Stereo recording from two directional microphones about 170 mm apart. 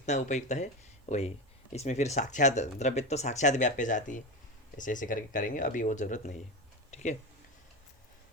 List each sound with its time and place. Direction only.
0.0 s speech: 45° left (ahead or behind)